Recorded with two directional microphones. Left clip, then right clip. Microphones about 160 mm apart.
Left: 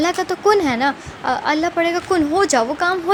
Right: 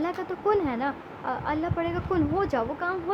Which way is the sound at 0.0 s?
35° left (ahead or behind).